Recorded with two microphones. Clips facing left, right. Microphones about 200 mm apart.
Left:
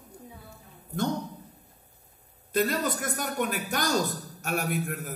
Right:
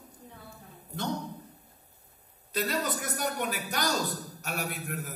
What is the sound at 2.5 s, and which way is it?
Speech, 50° left (ahead or behind).